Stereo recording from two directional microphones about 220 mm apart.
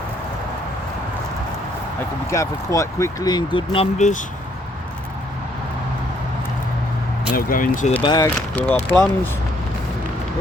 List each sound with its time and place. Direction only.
2.3 s speech: 15° left (ahead or behind); by 4.2 s 30° left (ahead or behind)
7.3 s speech: 40° left (ahead or behind)
8.0 s speech: 20° left (ahead or behind)
8.4 s speech: 5° left (ahead or behind)